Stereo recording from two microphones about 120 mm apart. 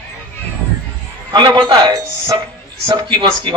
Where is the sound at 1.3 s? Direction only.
40° right (ahead or behind).